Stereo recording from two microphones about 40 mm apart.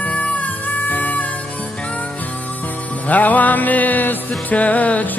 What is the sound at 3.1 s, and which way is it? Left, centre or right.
Music, left.